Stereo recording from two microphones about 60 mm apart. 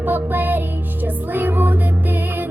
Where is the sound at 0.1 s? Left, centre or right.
Right.